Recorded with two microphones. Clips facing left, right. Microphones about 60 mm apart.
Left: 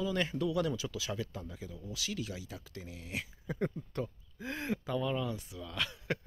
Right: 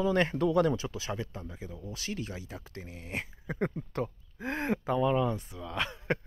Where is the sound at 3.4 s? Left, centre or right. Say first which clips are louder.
Right 3 dB; right.